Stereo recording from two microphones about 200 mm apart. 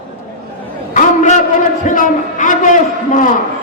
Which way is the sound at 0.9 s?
40° left (ahead or behind).